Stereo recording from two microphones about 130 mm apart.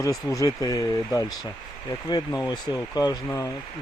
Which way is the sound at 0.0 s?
25° left (ahead or behind).